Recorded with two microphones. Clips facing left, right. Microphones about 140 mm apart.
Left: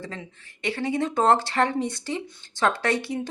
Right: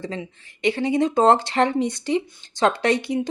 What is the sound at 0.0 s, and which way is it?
Speech, 20° right (ahead or behind).